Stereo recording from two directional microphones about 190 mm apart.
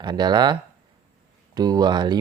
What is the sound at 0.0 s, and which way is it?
Speech, 20° right (ahead or behind).